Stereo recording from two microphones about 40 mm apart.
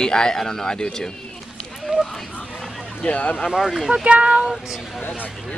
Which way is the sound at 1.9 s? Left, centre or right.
Right.